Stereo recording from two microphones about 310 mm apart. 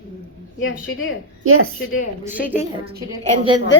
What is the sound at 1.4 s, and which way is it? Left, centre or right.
Speech, right.